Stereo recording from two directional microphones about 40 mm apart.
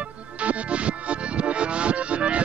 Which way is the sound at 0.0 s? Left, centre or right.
Right.